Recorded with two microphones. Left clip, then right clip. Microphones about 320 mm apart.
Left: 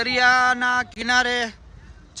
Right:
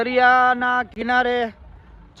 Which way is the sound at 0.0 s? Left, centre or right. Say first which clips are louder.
Right 2 dB; centre.